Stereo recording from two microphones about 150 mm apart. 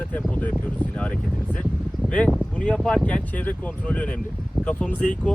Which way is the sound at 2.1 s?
5° left (ahead or behind).